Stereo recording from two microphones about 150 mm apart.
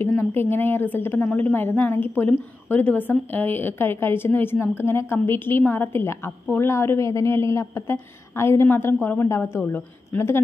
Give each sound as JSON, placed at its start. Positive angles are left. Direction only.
{"t": 0.1, "sound": "a woman's voice", "side_deg": 15}